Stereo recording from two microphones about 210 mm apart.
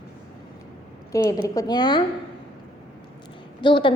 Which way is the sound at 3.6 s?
25° left (ahead or behind).